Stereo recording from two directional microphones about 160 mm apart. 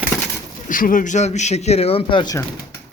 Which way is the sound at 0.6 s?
60° left (ahead or behind).